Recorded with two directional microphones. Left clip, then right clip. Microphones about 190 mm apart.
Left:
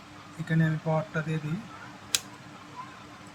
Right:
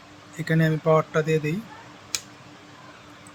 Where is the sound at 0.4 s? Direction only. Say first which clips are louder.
Right 9 dB; 60° right (ahead or behind).